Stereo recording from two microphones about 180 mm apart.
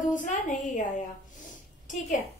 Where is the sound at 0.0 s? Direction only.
45° left (ahead or behind).